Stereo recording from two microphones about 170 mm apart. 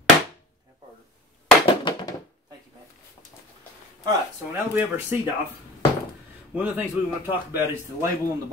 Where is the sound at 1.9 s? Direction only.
25° left (ahead or behind).